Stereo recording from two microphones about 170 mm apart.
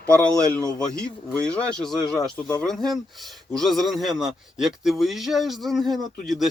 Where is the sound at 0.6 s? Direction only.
20° right (ahead or behind).